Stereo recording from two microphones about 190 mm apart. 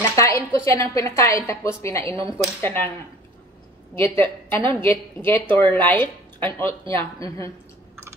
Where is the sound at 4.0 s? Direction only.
10° left (ahead or behind).